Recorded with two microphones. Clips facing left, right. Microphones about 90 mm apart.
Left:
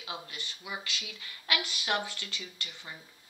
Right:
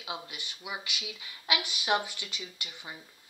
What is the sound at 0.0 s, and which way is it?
Speech, 15° right (ahead or behind).